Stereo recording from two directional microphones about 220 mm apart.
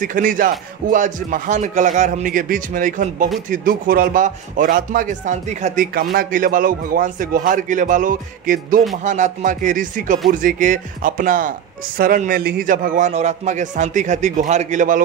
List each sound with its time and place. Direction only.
0.0 s speech: 40° right (ahead or behind)